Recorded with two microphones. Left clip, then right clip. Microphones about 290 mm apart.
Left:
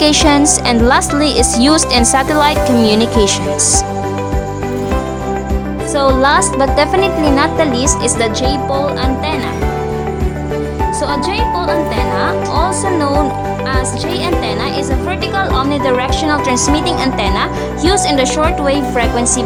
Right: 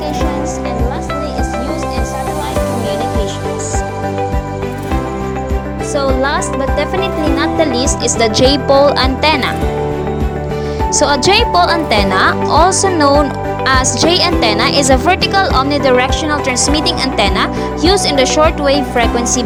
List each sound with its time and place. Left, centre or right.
0.0 s speech: left
6.0 s speech: centre; by 9.4 s right
11.0 s speech: right